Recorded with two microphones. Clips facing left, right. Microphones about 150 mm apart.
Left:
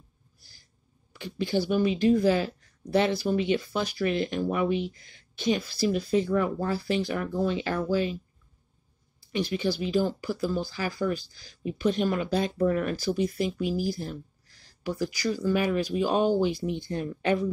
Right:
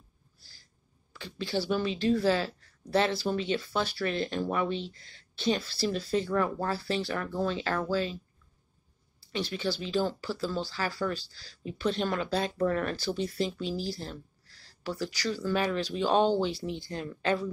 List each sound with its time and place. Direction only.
1.1 s speech: 15° left (ahead or behind)
9.5 s speech: 10° left (ahead or behind)